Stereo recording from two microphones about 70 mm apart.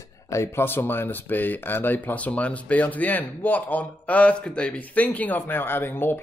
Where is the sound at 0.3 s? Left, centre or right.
Left.